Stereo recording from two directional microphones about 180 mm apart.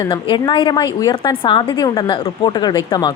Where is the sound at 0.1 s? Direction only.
25° left (ahead or behind).